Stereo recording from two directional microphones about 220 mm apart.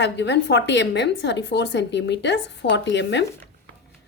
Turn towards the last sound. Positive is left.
turn(degrees=55)  # may be behind; listen again after turning